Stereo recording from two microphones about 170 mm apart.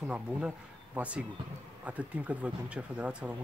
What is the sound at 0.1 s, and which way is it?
Speech, 5° right (ahead or behind).